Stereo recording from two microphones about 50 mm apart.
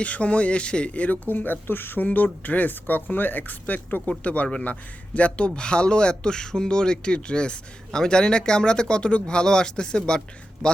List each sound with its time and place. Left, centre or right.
0.0 s a man's voice: left